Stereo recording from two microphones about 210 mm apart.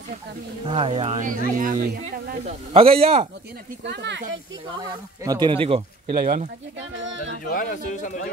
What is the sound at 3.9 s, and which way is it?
Speech, 55° right (ahead or behind).